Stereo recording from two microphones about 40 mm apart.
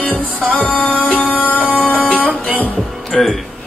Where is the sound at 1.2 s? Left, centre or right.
Left.